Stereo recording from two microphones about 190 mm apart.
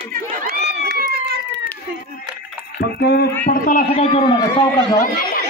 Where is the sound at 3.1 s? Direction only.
55° left (ahead or behind).